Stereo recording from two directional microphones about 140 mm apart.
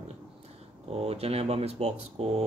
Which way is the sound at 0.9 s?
45° right (ahead or behind).